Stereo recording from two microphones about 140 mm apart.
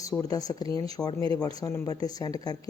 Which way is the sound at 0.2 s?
25° left (ahead or behind).